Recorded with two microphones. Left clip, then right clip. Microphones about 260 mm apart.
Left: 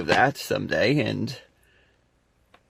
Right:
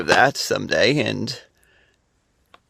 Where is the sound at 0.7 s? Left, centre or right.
Right.